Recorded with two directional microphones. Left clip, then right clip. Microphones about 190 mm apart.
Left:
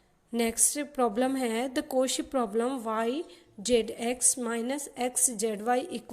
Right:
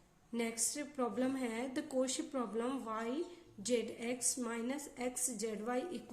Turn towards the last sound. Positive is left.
turn(degrees=40)  # may be behind; listen again after turning